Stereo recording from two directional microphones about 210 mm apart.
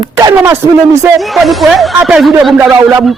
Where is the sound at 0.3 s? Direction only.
10° right (ahead or behind).